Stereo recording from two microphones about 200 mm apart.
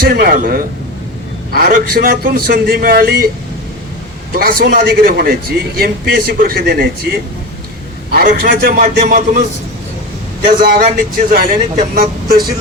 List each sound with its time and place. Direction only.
0.0 s a man's voice: 45° right (ahead or behind)
4.4 s a man's voice: 50° right (ahead or behind)
10.6 s a man's voice: 45° right (ahead or behind)